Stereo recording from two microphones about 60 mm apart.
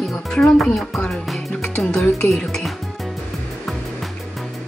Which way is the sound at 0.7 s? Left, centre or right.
Centre.